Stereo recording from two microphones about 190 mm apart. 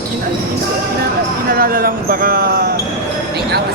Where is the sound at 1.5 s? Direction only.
50° right (ahead or behind).